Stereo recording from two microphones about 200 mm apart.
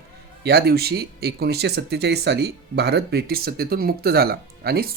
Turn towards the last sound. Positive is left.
turn(degrees=-50)  # may be behind; listen again after turning